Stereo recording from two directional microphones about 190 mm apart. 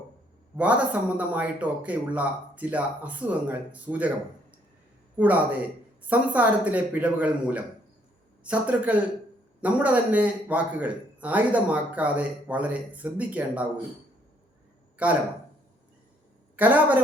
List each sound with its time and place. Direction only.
0.5 s a man's voice: 5° right (ahead or behind)
5.1 s a man's voice: 10° right (ahead or behind)
15.0 s a man's voice: 5° right (ahead or behind)
16.6 s a man's voice: 10° right (ahead or behind)